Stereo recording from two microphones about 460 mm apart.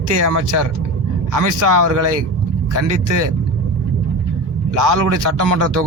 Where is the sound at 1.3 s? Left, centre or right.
Right.